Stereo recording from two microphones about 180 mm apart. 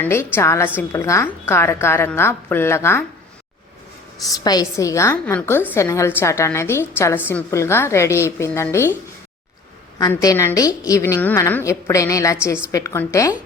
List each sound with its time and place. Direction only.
0.0 s a woman's voice: 15° left (ahead or behind)
4.2 s a woman's voice: 20° left (ahead or behind)
10.1 s a woman's voice: 15° left (ahead or behind)